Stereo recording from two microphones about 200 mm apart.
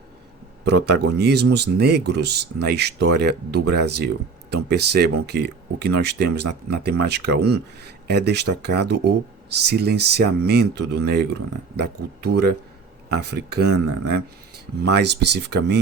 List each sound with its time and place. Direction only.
0.6 s speech: 55° right (ahead or behind)